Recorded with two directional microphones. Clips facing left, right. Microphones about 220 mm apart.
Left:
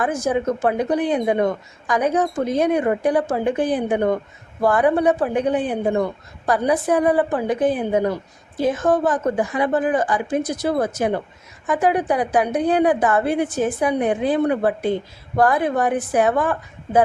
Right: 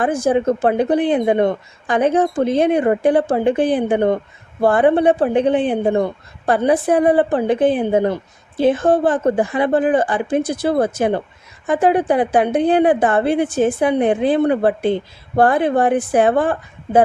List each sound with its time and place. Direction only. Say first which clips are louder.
0.0 s speech: right 4 dB; 30° right (ahead or behind)